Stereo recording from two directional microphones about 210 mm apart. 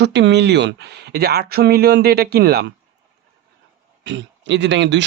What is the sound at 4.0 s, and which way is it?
A man's voice, 60° right (ahead or behind).